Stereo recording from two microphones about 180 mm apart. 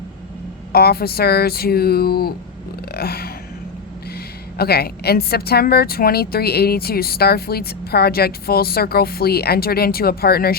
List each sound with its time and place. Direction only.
0.7 s speech: 60° left (ahead or behind)
2.9 s a sound: 60° left (ahead or behind)
4.5 s speech: 60° left (ahead or behind)